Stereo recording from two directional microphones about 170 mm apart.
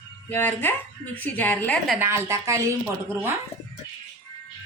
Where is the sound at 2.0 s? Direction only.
15° right (ahead or behind).